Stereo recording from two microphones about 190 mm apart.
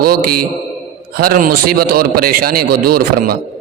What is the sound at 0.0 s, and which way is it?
Speech, 50° right (ahead or behind).